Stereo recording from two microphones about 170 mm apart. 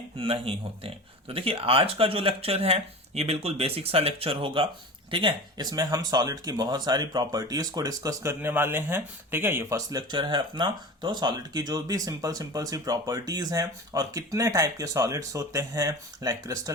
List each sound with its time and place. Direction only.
0.2 s speech: 35° right (ahead or behind)